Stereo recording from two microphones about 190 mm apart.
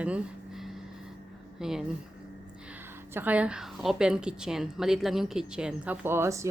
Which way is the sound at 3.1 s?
10° right (ahead or behind).